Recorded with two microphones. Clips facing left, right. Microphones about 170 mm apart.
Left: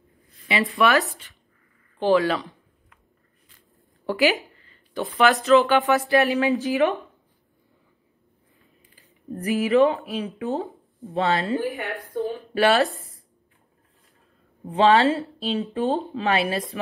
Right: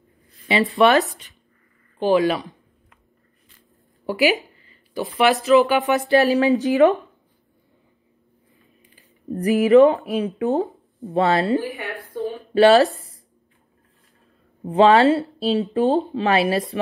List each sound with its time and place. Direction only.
0.5 s speech: 35° right (ahead or behind)
0.9 s speech: 20° right (ahead or behind)
4.0 s speech: 15° right (ahead or behind)
4.9 s speech: 5° right (ahead or behind); by 6.1 s 20° right (ahead or behind)
6.2 s speech: 40° right (ahead or behind)
9.3 s speech: 40° right (ahead or behind)
12.1 s a sound: centre (ahead or behind)
12.5 s speech: 30° right (ahead or behind)
14.7 s speech: 35° right (ahead or behind)